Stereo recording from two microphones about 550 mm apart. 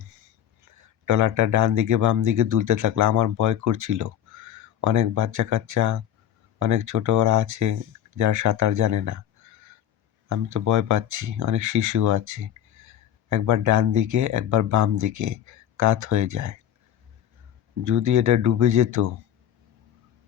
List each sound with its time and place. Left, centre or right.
0.7 s speech: right
10.2 s speech: right
17.8 s speech: right